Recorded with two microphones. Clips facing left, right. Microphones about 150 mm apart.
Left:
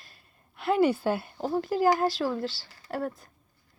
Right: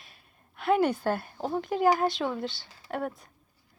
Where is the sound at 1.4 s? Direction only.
Centre (ahead or behind).